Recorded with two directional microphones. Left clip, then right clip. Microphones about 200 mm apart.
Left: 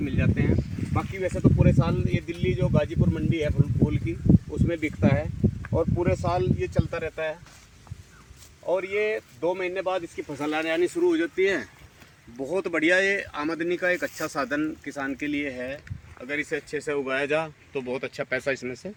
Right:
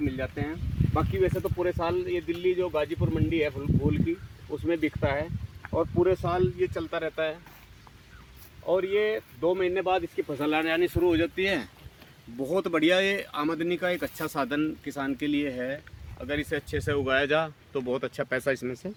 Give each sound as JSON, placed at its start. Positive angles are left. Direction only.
{"t": 0.0, "sound": "speech", "side_deg": 40}
{"t": 8.6, "sound": "speech", "side_deg": 40}
{"t": 10.3, "sound": "speech", "side_deg": 20}
{"t": 11.0, "sound": "speech", "side_deg": -50}
{"t": 16.2, "sound": "speech", "side_deg": -20}